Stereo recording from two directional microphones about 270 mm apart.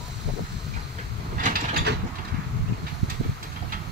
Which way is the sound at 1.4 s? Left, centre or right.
Right.